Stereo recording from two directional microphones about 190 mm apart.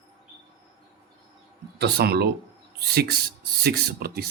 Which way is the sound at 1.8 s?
55° right (ahead or behind).